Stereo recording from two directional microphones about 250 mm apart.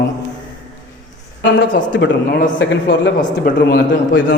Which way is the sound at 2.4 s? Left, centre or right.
Left.